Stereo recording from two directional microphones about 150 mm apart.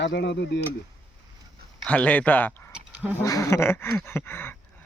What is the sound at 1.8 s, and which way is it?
Speech, 10° left (ahead or behind).